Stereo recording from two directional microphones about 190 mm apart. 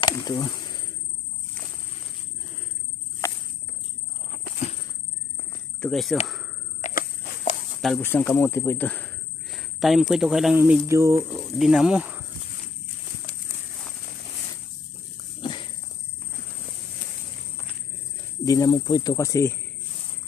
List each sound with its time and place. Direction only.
0.0 s insect: 20° left (ahead or behind)
3.2 s cricket: 15° left (ahead or behind)
5.8 s speech: centre (ahead or behind)
6.8 s walk: 50° left (ahead or behind)
8.0 s speech: 10° left (ahead or behind)
10.8 s speech: 15° right (ahead or behind)
11.5 s speech: centre (ahead or behind)
15.4 s walk: 25° left (ahead or behind)
18.4 s speech: 20° left (ahead or behind)